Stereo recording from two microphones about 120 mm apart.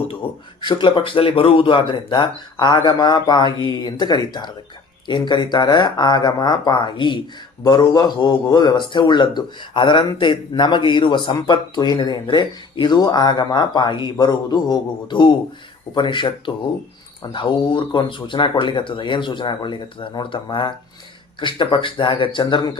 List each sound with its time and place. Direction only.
0.1 s a man's voice: 45° left (ahead or behind)
17.3 s a man's voice: 45° left (ahead or behind)